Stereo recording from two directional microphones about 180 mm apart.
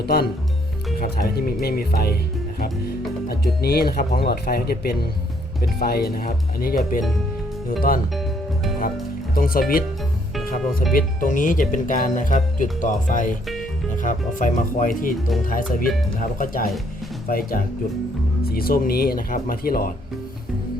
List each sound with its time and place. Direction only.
0.0 s speech: 60° left (ahead or behind)
7.8 s speech: 50° left (ahead or behind)
9.3 s speech: 55° left (ahead or behind)
10.9 s speech: 45° left (ahead or behind)